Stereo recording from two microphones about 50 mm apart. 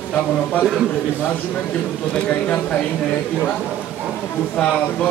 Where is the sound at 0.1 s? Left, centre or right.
Left.